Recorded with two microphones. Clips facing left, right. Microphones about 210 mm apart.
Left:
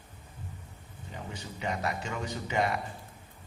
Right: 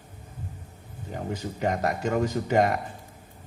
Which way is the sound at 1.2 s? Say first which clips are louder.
Right 10 dB; 50° right (ahead or behind).